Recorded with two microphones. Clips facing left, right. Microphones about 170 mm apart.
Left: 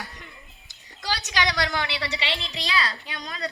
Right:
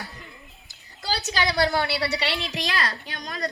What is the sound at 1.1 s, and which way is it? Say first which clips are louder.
Speech: right 2 dB; 35° right (ahead or behind).